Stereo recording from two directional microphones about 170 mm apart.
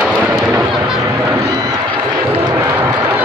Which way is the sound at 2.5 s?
15° right (ahead or behind).